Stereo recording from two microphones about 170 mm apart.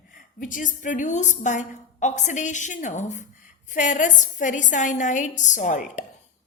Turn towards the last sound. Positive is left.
turn(degrees=50)  # may be behind; listen again after turning